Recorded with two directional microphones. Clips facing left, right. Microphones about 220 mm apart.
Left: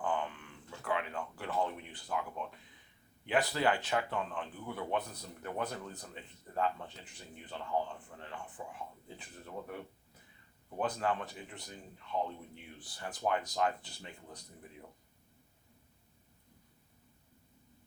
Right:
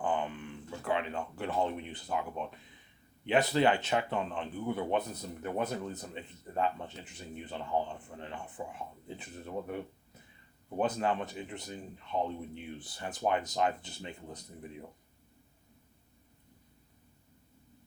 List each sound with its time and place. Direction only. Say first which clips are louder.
0.0 s speech: right 3 dB; 20° right (ahead or behind)